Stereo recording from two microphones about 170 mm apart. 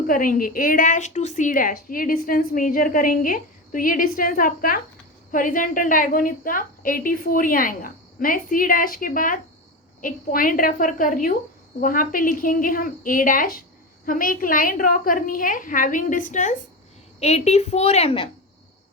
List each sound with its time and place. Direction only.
0.1 s a woman's voice: 55° left (ahead or behind); by 18.3 s 35° left (ahead or behind)